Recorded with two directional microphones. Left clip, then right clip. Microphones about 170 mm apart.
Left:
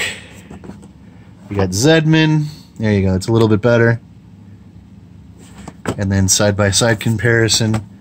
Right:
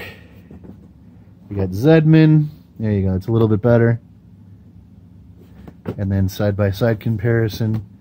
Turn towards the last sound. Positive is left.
turn(degrees=-15)  # may be behind; listen again after turning